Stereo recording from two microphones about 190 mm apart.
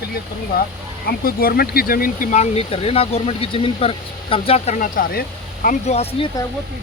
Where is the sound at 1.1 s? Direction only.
50° left (ahead or behind); by 6.3 s 35° left (ahead or behind).